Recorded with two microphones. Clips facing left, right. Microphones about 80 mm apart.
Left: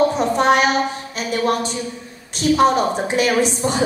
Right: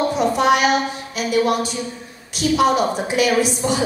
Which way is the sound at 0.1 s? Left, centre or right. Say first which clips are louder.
Even; left.